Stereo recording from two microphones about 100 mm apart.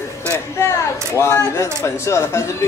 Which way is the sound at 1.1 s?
30° left (ahead or behind).